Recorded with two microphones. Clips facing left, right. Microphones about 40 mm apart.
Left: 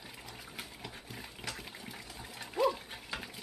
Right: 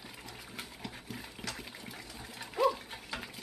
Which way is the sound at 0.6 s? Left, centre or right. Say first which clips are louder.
Right 2 dB; centre.